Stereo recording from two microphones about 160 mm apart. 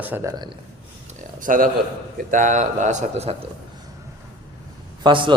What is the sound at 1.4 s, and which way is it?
A man's voice, 60° right (ahead or behind).